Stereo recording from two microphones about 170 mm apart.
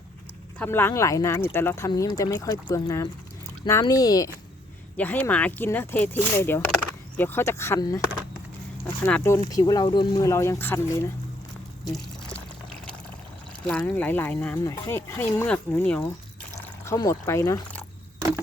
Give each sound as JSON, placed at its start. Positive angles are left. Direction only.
{"t": 0.6, "sound": "speech", "side_deg": 15}
{"t": 4.9, "sound": "speech", "side_deg": 10}
{"t": 9.0, "sound": "speech", "side_deg": 10}
{"t": 9.4, "sound": "speech", "side_deg": 20}
{"t": 13.7, "sound": "speech", "side_deg": 10}